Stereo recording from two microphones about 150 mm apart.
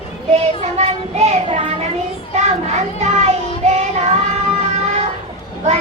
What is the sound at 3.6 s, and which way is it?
Child singing, 50° right (ahead or behind).